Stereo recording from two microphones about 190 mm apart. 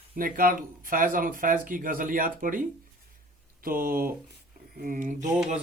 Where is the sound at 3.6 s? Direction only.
50° right (ahead or behind).